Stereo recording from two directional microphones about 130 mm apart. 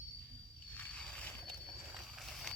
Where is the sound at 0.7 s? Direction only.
5° left (ahead or behind).